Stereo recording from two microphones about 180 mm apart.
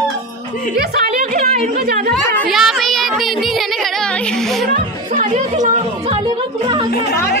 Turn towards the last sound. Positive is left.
turn(degrees=-40)  # may be behind; listen again after turning